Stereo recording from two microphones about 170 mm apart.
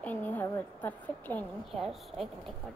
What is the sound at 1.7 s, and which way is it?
Speech, centre (ahead or behind).